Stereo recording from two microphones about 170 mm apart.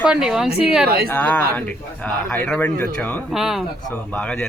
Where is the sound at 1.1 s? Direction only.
10° left (ahead or behind).